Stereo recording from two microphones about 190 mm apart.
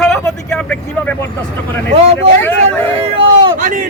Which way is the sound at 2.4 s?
10° left (ahead or behind).